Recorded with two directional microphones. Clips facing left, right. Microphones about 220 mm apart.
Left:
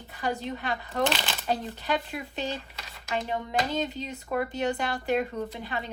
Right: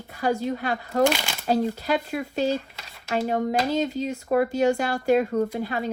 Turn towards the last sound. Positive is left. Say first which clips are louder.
# right 8 dB
turn(degrees=-45)  # may be behind; listen again after turning